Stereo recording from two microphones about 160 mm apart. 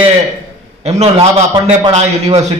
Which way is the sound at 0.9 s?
40° right (ahead or behind).